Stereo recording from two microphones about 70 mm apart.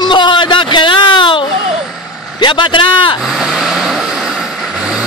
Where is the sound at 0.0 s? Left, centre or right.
Left.